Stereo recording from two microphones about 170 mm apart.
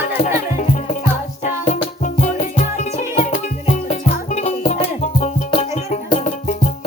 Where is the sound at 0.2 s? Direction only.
40° left (ahead or behind).